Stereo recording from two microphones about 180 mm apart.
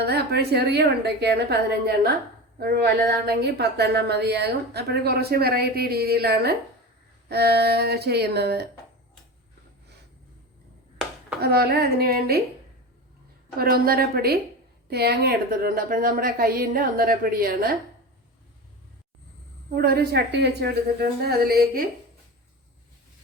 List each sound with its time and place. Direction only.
0.0 s a woman's voice: 65° right (ahead or behind)
2.6 s a woman's voice: 60° right (ahead or behind)
11.3 s a woman's voice: 60° right (ahead or behind)
13.6 s a woman's voice: 55° right (ahead or behind)
19.7 s a woman's voice: 60° right (ahead or behind)